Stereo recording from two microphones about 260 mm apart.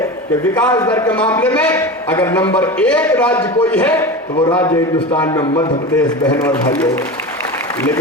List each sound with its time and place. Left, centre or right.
0.5 s a man's voice: centre
4.4 s a man's voice: centre